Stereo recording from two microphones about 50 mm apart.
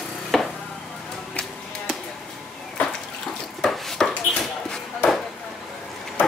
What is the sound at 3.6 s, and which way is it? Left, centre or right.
Chopping, centre.